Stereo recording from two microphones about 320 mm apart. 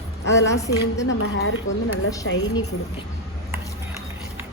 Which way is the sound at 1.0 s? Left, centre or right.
Left.